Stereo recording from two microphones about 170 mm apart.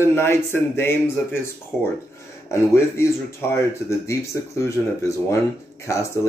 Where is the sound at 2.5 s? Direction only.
15° left (ahead or behind).